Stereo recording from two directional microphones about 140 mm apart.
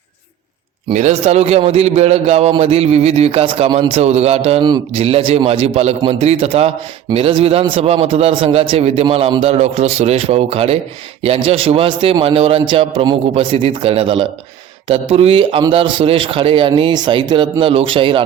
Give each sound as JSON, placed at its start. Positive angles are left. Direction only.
{"t": 0.9, "sound": "a man's voice", "side_deg": -55}